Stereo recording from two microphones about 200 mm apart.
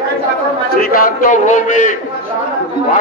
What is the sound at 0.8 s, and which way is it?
A man's voice, 45° left (ahead or behind).